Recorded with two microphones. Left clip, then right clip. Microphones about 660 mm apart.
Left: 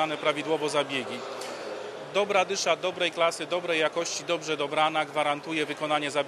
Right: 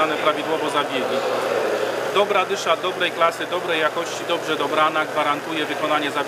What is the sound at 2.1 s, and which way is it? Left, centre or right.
Speech, left.